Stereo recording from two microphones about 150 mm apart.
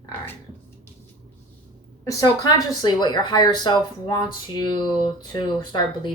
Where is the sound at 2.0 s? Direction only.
20° left (ahead or behind).